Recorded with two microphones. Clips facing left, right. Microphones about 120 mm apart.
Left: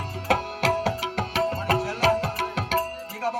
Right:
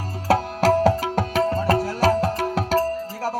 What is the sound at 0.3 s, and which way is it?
Tabla, 40° right (ahead or behind).